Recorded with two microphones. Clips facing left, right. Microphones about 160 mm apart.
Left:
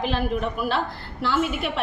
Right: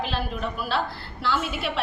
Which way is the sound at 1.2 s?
45° left (ahead or behind).